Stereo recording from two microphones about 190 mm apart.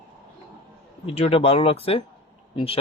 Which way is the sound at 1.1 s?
30° left (ahead or behind).